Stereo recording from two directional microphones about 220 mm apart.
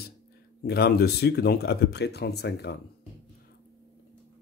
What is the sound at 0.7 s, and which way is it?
Speech, 45° left (ahead or behind).